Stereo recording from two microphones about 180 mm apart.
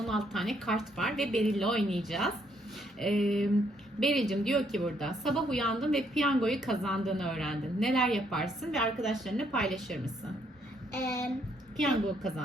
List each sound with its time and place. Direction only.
0.0 s a woman's voice: centre (ahead or behind)
10.9 s child singing: 15° left (ahead or behind)